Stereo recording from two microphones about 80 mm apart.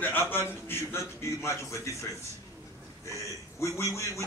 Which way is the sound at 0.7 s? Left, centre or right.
Left.